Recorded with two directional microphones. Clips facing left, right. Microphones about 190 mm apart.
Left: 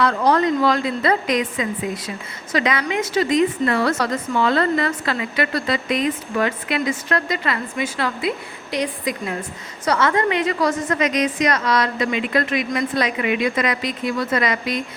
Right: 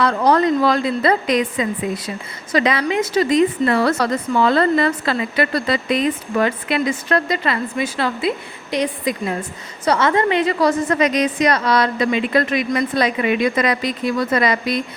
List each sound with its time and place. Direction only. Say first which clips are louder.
0.0 s a woman's voice: right 2 dB; 35° right (ahead or behind)